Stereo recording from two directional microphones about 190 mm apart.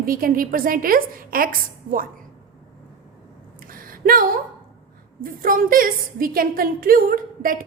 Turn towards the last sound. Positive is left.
turn(degrees=-45)  # may be behind; listen again after turning